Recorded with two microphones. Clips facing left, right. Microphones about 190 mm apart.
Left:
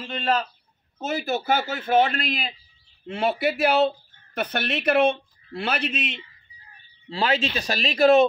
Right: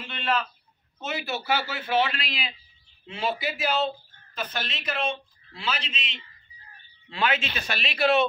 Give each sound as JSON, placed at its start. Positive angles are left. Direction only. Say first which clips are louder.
{"t": 0.0, "sound": "speech", "louder": "left 3 dB", "side_deg": 40}
{"t": 7.1, "sound": "speech", "louder": "left 3 dB", "side_deg": 35}